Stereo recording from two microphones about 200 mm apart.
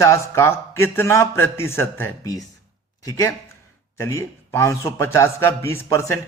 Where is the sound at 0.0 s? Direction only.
15° left (ahead or behind).